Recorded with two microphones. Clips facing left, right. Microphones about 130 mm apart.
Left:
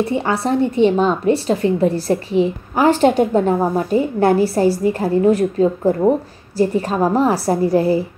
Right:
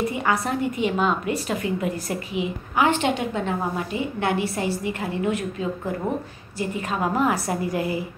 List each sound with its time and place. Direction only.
0.0 s a woman's voice: 30° left (ahead or behind)